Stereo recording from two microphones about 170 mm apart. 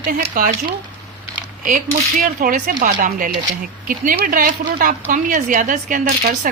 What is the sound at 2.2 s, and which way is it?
A woman's voice, 55° right (ahead or behind).